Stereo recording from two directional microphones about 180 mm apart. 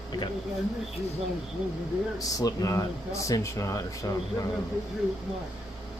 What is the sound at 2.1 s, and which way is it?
Speech, 20° left (ahead or behind).